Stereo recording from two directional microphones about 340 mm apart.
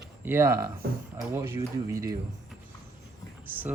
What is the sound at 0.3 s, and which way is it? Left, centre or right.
Speech, centre.